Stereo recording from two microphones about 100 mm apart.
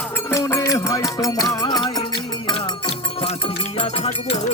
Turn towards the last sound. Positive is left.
turn(degrees=85)